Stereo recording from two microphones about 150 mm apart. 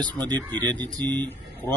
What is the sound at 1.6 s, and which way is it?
Speech, 15° left (ahead or behind).